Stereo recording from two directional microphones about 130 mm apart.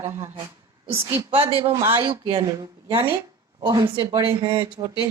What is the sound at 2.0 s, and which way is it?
A woman's voice, 35° right (ahead or behind).